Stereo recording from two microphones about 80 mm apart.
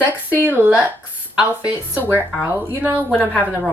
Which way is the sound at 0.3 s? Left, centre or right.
Right.